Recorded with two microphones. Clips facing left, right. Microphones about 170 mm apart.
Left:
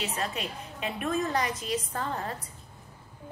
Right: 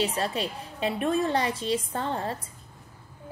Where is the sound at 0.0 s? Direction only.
30° right (ahead or behind).